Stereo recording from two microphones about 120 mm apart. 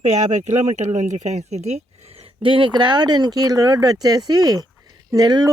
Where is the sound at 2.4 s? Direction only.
45° right (ahead or behind).